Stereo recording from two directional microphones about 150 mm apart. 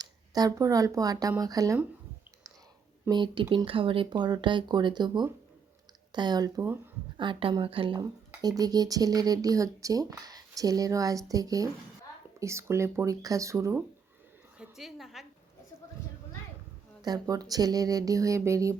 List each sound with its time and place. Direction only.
0.0 s speech: 25° right (ahead or behind)
3.1 s speech: 30° right (ahead or behind)
14.6 s a woman's voice: centre (ahead or behind)
17.0 s speech: 25° right (ahead or behind)